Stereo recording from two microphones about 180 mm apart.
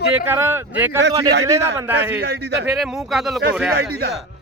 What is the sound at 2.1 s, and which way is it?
Speech, 65° right (ahead or behind).